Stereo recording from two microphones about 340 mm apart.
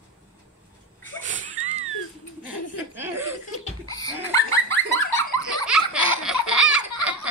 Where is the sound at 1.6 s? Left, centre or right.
Right.